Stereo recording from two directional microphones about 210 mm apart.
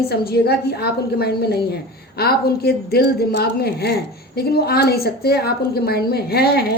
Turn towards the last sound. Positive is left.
turn(degrees=50)  # may be behind; listen again after turning